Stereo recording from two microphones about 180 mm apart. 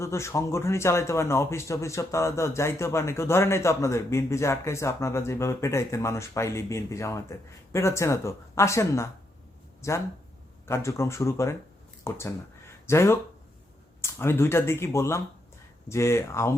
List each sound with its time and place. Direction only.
0.0 s speech: 15° left (ahead or behind)